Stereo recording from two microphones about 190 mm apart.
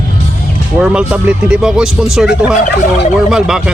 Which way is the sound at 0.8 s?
5° right (ahead or behind).